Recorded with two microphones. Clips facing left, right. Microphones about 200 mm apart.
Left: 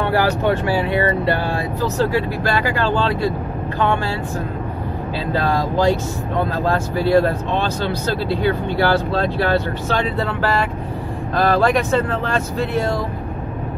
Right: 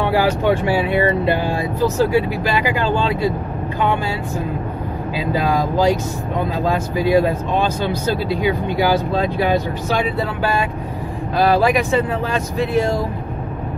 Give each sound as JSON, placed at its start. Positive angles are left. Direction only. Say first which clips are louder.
{"t": 0.0, "sound": "speech", "louder": "right 1 dB", "side_deg": -15}
{"t": 5.2, "sound": "speech", "louder": "right 1 dB", "side_deg": -15}